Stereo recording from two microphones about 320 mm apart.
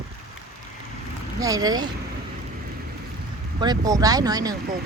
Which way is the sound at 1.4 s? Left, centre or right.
Centre.